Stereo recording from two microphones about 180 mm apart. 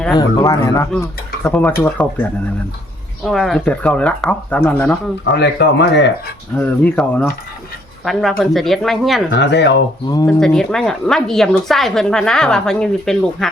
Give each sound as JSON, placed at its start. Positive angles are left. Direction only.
{"t": 0.2, "sound": "speech", "side_deg": 20}
{"t": 3.2, "sound": "speech", "side_deg": 0}
{"t": 5.2, "sound": "speech", "side_deg": 70}
{"t": 6.6, "sound": "speech", "side_deg": 10}
{"t": 9.3, "sound": "speech", "side_deg": 70}
{"t": 10.2, "sound": "speech", "side_deg": 5}